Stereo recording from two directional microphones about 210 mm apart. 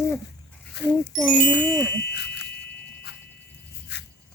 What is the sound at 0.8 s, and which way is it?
Speech, 55° left (ahead or behind).